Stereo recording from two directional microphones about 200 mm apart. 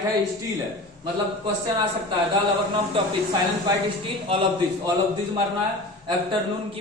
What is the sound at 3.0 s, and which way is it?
Speech, 25° right (ahead or behind).